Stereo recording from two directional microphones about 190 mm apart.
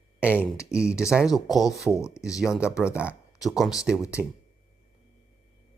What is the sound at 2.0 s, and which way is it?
Speech, 15° left (ahead or behind).